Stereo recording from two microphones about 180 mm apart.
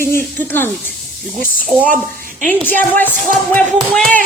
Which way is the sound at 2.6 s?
10° left (ahead or behind).